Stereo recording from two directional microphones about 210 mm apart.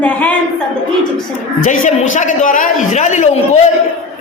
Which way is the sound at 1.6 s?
35° left (ahead or behind).